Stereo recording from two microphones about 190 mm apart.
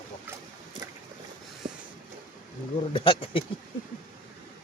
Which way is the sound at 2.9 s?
30° left (ahead or behind).